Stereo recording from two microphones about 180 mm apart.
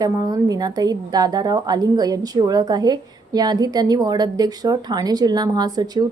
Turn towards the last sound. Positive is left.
turn(degrees=-20)  # may be behind; listen again after turning